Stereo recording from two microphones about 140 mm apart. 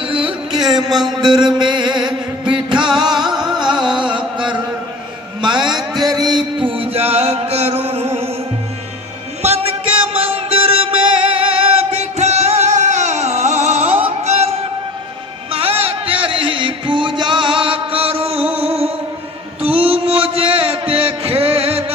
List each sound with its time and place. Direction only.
0.0 s music: 40° right (ahead or behind)
0.8 s a sound: centre (ahead or behind)
1.3 s mantra: 30° right (ahead or behind)
3.3 s music: 5° right (ahead or behind)
4.1 s chant: 10° right (ahead or behind)
5.4 s a sound: 30° right (ahead or behind); by 8.3 s 50° right (ahead or behind)
9.4 s music: 45° right (ahead or behind)
19.6 s mantra: 45° right (ahead or behind)